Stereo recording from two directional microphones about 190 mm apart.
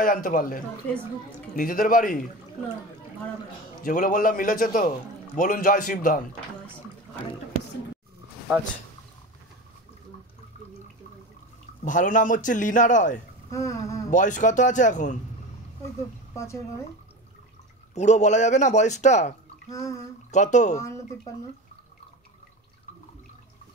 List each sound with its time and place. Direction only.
0.0 s a man's voice: 45° left (ahead or behind)
1.6 s a man's voice: 45° left (ahead or behind)
3.8 s a man's voice: 45° left (ahead or behind)
11.8 s a man's voice: 45° left (ahead or behind)
13.5 s a sound: 15° left (ahead or behind)
14.1 s speech: 40° left (ahead or behind)
17.9 s speech: 35° left (ahead or behind)
19.7 s speech: 15° left (ahead or behind)
20.2 s speech: 40° left (ahead or behind)